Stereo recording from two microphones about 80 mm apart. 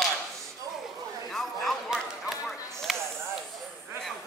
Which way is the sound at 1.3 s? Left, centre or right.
Centre.